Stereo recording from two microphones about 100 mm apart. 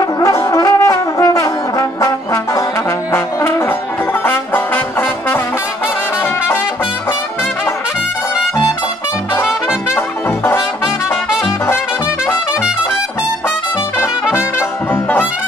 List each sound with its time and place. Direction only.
0.0 s brass instrument: 35° left (ahead or behind)
3.1 s music: 25° left (ahead or behind)
6.2 s brass instrument: 20° left (ahead or behind)
9.9 s music: 25° left (ahead or behind)
14.9 s music: 20° left (ahead or behind)